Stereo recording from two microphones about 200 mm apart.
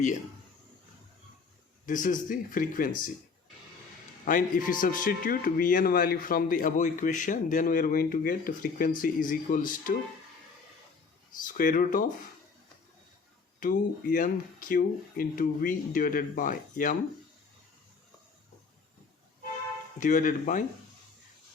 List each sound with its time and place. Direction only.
1.9 s speech: 40° left (ahead or behind)
4.3 s a man's voice: 45° left (ahead or behind)
11.4 s a man's voice: 40° left (ahead or behind)
13.6 s a man's voice: 45° left (ahead or behind)
20.0 s speech: 40° left (ahead or behind)